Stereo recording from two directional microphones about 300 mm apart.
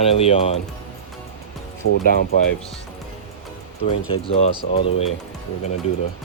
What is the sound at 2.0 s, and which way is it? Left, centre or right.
Speech, left.